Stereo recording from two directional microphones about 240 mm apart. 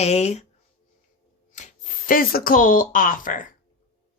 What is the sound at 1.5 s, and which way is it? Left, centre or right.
Speech, left.